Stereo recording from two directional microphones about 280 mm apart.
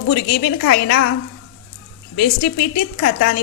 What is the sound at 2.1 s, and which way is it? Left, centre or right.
Speech, left.